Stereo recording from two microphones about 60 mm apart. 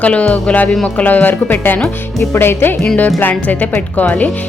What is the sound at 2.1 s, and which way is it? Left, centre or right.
Speech, left.